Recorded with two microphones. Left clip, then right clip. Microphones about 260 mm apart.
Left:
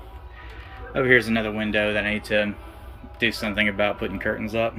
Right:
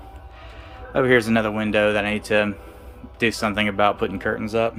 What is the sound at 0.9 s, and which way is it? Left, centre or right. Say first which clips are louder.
Speech: right 1 dB; centre.